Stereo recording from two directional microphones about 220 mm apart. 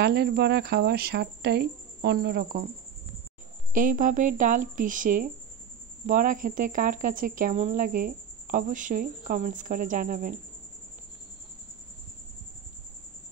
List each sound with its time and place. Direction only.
0.0 s speech: 45° right (ahead or behind)
3.7 s speech: 35° right (ahead or behind)